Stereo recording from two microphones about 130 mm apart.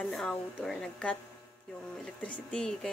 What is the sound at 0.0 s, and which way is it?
Speech, 5° left (ahead or behind).